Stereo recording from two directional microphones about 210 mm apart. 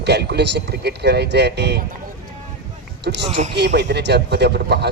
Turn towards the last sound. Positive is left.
turn(degrees=-50)  # may be behind; listen again after turning